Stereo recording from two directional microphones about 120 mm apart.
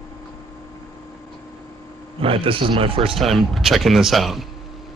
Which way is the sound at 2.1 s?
50° right (ahead or behind).